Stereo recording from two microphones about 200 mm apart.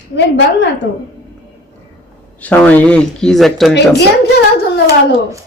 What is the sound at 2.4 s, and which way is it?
Speech, 10° left (ahead or behind).